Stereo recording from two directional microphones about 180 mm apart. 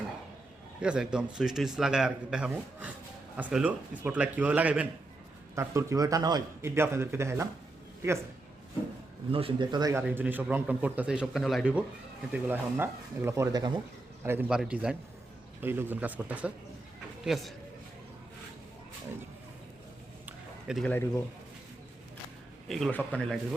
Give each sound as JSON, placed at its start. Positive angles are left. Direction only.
{"t": 0.8, "sound": "a man's voice", "side_deg": -5}
{"t": 9.3, "sound": "a man's voice", "side_deg": -30}
{"t": 10.0, "sound": "a man's voice", "side_deg": -5}
{"t": 14.3, "sound": "a man's voice", "side_deg": -10}
{"t": 20.2, "sound": "a sound", "side_deg": -5}
{"t": 20.8, "sound": "speech", "side_deg": 15}
{"t": 22.7, "sound": "a man's voice", "side_deg": 0}